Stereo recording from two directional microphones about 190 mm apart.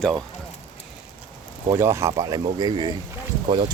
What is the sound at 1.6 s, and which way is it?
Speech, 15° right (ahead or behind).